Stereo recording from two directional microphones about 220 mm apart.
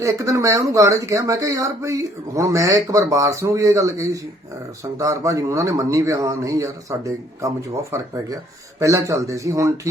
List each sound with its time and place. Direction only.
0.0 s speech: 15° right (ahead or behind)